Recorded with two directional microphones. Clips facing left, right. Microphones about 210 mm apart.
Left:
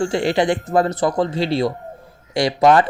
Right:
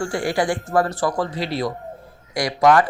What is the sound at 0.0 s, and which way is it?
Speech, 25° left (ahead or behind).